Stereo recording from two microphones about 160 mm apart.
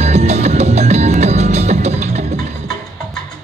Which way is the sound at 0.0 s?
45° right (ahead or behind).